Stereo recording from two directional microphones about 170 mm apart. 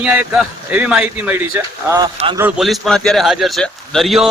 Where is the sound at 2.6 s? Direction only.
Centre (ahead or behind).